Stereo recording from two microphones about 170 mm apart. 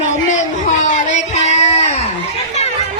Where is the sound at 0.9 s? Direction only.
45° left (ahead or behind).